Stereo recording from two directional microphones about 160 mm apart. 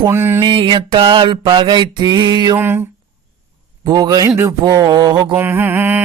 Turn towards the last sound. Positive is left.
turn(degrees=-10)  # may be behind; listen again after turning